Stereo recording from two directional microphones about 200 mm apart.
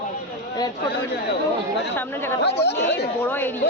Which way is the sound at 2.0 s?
10° left (ahead or behind).